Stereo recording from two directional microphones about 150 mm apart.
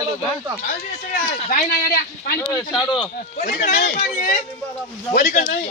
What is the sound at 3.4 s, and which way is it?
Speech, 65° left (ahead or behind).